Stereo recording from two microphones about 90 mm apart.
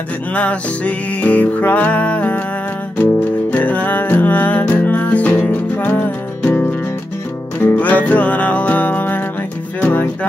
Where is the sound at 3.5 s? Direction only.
20° left (ahead or behind).